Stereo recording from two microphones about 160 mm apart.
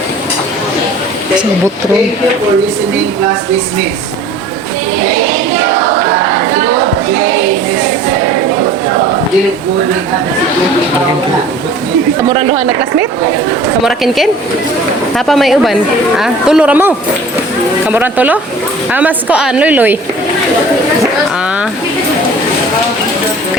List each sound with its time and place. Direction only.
12.3 s a woman's voice: 35° right (ahead or behind)
13.8 s a woman's voice: centre (ahead or behind)